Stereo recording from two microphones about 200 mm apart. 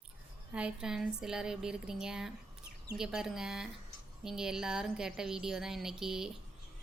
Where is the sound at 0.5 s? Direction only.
5° right (ahead or behind).